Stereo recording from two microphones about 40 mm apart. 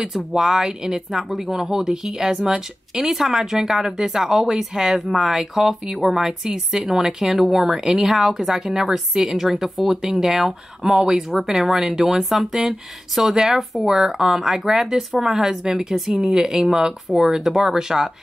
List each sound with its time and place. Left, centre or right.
0.0 s speech: centre
12.1 s speech: centre